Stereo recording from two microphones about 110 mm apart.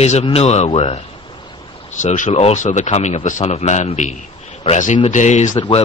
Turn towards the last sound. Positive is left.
turn(degrees=50)  # may be behind; listen again after turning